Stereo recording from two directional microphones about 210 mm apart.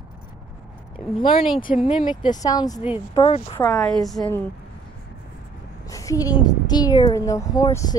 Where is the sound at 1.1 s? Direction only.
25° left (ahead or behind).